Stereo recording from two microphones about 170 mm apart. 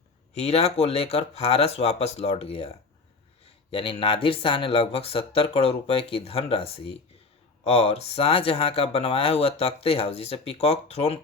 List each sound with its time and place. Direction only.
0.3 s speech: 40° left (ahead or behind)
3.7 s speech: 30° left (ahead or behind)